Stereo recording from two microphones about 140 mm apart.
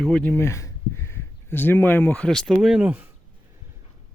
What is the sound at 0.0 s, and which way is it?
Speech, 5° left (ahead or behind).